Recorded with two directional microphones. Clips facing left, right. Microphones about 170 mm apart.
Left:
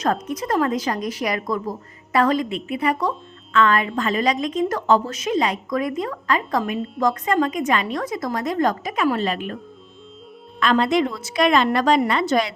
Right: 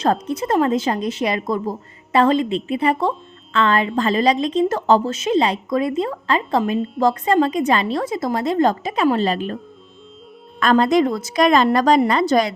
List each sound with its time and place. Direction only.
0.0 s a woman's voice: 30° right (ahead or behind)
10.6 s a woman's voice: 45° right (ahead or behind)